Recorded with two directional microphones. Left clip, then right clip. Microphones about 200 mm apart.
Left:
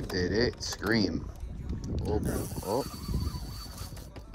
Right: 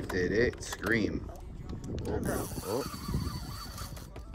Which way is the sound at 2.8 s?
35° right (ahead or behind).